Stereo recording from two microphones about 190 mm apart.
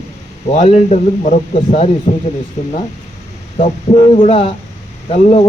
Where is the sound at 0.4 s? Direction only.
35° left (ahead or behind).